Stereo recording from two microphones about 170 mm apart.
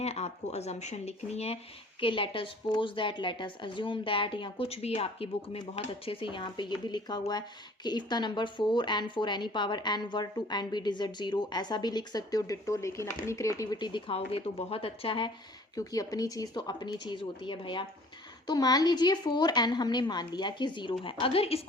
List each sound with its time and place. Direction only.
0.0 s a woman's voice: 40° left (ahead or behind)